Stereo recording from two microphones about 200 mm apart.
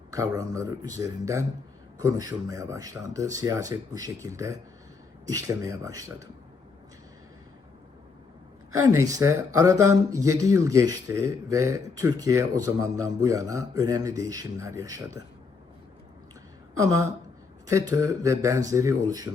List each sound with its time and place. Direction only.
0.1 s speech: 15° right (ahead or behind)
8.9 s speech: 15° right (ahead or behind)
17.7 s speech: 15° right (ahead or behind)